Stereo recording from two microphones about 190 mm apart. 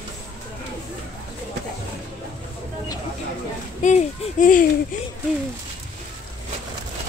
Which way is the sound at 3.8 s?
40° left (ahead or behind).